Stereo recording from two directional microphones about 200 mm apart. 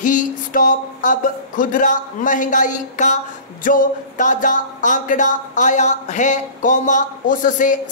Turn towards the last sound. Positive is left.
turn(degrees=40)  # may be behind; listen again after turning